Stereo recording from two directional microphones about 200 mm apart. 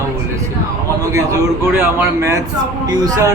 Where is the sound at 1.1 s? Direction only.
15° right (ahead or behind).